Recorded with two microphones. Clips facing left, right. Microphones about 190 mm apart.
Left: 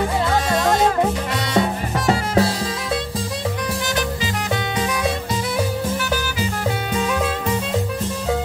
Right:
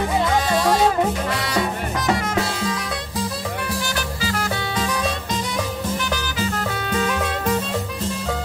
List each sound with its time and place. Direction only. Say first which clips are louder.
2.0 s drum kit: left 4 dB; 30° left (ahead or behind)